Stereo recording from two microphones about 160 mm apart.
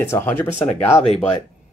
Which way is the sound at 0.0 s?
15° left (ahead or behind).